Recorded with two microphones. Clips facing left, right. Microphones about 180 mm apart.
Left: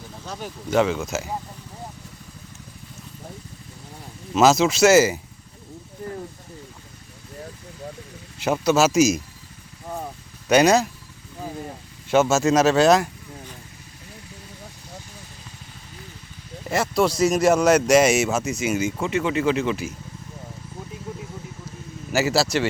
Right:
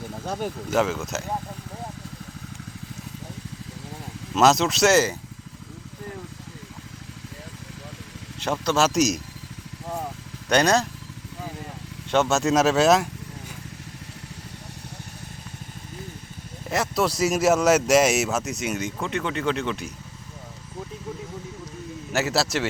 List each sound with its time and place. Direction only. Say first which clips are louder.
0.3 s speech: right 5 dB; 50° right (ahead or behind)
0.7 s speech: left 4 dB; 5° right (ahead or behind)
4.4 s speech: left 2 dB; centre (ahead or behind)
8.4 s speech: left 4 dB; 5° left (ahead or behind)
10.5 s speech: left 4 dB; 5° left (ahead or behind)
12.1 s speech: left 3 dB; 5° left (ahead or behind)
16.6 s speech: left 3 dB; centre (ahead or behind)
22.1 s speech: left 3 dB; centre (ahead or behind)